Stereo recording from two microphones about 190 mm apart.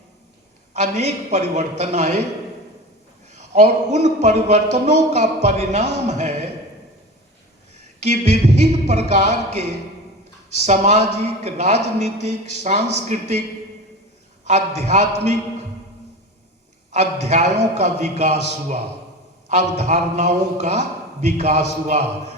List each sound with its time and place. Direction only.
0.7 s a man's voice: 35° right (ahead or behind)
3.3 s a man's voice: 35° right (ahead or behind)
8.0 s a man's voice: 35° right (ahead or behind)
14.8 s a man's voice: 35° right (ahead or behind)
16.9 s a man's voice: 35° right (ahead or behind)
19.5 s a man's voice: 35° right (ahead or behind)